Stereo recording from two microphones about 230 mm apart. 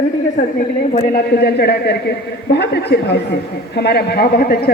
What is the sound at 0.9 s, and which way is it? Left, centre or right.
A man's voice, left.